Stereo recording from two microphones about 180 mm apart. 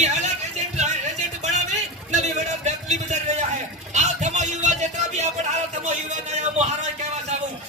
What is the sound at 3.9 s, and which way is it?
Music, 40° right (ahead or behind).